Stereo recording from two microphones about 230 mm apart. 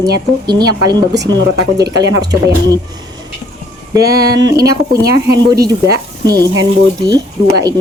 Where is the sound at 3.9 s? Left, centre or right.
Centre.